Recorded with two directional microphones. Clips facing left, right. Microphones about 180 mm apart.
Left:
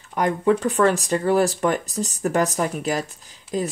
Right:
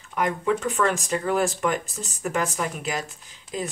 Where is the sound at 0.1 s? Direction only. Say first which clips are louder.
Left 4 dB; 35° left (ahead or behind).